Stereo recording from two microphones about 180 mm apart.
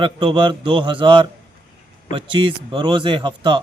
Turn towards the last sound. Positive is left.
turn(degrees=-25)  # may be behind; listen again after turning